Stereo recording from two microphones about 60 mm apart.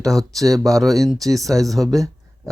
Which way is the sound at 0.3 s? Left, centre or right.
Right.